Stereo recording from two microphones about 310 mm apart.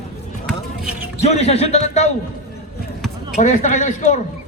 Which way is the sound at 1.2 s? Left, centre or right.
Left.